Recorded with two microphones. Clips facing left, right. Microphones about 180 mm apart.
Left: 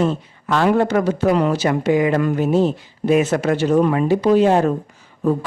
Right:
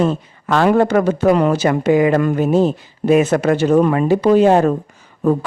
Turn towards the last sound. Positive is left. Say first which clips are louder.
# right 3 dB
turn(degrees=-60)  # may be behind; listen again after turning